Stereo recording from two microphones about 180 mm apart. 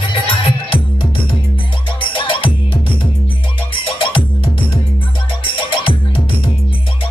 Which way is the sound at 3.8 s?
30° left (ahead or behind).